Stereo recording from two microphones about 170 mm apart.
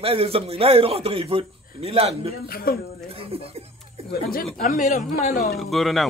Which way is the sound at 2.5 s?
60° left (ahead or behind).